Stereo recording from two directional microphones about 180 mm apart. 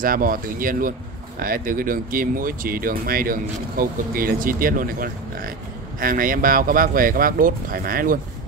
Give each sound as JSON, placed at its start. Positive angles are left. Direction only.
{"t": 0.0, "sound": "speech", "side_deg": -50}